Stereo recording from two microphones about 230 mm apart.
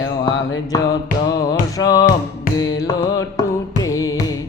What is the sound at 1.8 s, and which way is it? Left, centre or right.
Carnatic music, centre.